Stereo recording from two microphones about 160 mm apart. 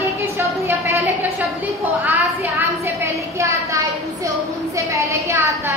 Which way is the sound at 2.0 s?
10° right (ahead or behind).